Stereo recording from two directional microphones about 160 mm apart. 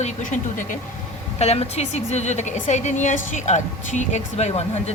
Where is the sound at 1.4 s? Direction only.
40° left (ahead or behind).